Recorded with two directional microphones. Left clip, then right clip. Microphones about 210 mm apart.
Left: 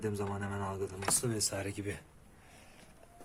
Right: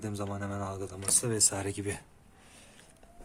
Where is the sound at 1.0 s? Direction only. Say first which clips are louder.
Right 6 dB; 40° right (ahead or behind).